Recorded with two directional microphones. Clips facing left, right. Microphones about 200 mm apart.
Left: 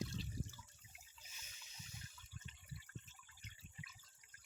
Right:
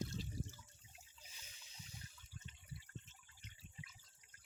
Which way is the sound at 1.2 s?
30° right (ahead or behind).